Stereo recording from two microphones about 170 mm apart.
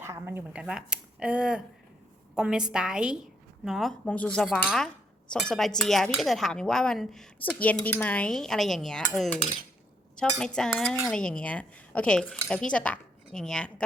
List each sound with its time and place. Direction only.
0.1 s speech: 15° right (ahead or behind)
2.3 s cutlery: 5° right (ahead or behind)